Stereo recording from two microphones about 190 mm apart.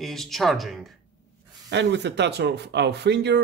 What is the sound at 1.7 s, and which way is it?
Speech, 65° right (ahead or behind).